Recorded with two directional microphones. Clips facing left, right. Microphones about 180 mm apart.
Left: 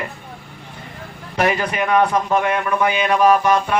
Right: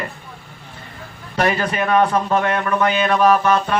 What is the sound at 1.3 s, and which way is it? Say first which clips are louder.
A man's voice: even; 15° left (ahead or behind).